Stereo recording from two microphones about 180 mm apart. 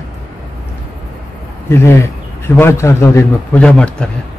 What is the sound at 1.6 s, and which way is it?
A man's voice, 15° left (ahead or behind).